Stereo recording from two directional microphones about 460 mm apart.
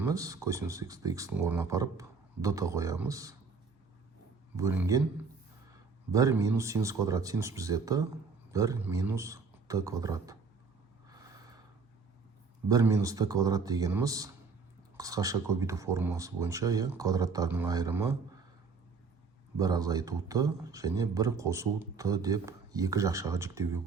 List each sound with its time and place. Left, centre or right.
0.0 s speech: centre
4.5 s speech: centre
6.1 s speech: centre
11.1 s snort: centre
12.6 s speech: centre
19.5 s speech: centre